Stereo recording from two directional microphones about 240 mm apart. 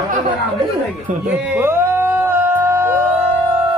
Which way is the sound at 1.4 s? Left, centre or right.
Centre.